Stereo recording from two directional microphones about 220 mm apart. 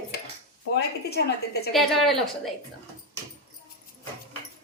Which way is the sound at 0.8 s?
45° left (ahead or behind).